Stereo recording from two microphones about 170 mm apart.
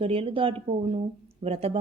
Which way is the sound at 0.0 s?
35° right (ahead or behind).